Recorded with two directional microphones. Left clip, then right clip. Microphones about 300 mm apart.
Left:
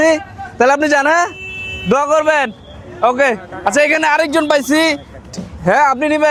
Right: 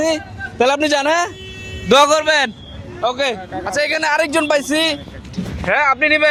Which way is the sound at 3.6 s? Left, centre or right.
Left.